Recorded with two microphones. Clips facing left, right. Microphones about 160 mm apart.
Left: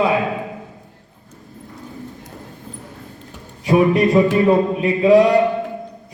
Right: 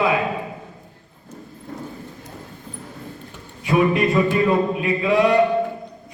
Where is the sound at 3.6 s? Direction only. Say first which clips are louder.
Left 4 dB; 35° left (ahead or behind).